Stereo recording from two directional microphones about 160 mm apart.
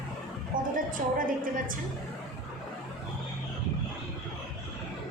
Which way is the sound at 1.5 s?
60° right (ahead or behind).